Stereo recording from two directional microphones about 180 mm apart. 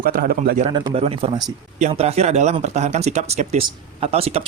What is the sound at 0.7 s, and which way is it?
Speech, 30° right (ahead or behind).